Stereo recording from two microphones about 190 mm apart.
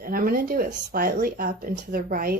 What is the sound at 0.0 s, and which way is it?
Speech, 50° right (ahead or behind).